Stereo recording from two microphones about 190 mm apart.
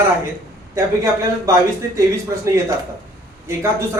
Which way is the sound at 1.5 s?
15° right (ahead or behind).